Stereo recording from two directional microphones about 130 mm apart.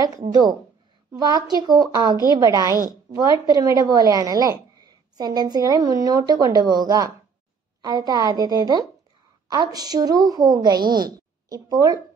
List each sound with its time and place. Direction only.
0.3 s a woman's voice: 30° right (ahead or behind)